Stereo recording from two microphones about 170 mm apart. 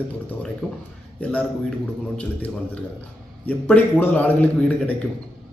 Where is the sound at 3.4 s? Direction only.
10° left (ahead or behind).